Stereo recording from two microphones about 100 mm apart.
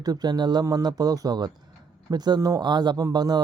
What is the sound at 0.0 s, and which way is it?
Speech, 40° right (ahead or behind).